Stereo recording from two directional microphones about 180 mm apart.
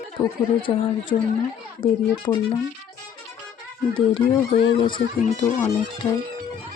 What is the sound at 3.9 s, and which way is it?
Speech, 30° left (ahead or behind).